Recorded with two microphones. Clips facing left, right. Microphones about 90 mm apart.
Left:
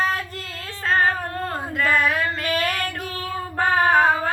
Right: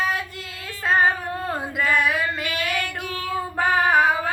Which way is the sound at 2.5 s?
40° left (ahead or behind).